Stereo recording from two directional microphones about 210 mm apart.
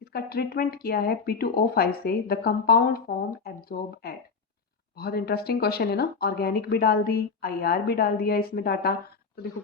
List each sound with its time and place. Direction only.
0.1 s speech: 50° left (ahead or behind)